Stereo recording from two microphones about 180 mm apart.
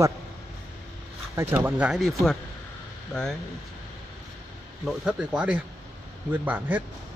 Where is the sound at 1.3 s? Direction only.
10° right (ahead or behind).